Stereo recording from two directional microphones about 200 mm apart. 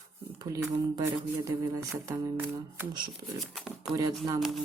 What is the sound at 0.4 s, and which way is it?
Speech, 15° right (ahead or behind).